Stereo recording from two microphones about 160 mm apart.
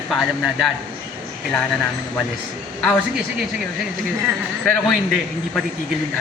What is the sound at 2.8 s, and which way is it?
Speech, 5° left (ahead or behind).